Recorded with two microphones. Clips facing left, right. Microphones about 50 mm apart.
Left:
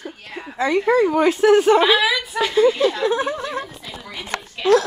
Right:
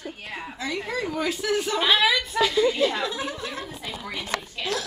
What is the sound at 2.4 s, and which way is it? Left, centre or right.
Speech, left.